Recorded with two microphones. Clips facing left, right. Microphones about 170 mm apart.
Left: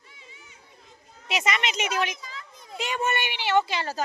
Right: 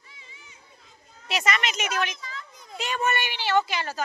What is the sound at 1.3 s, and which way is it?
Speech, 20° left (ahead or behind).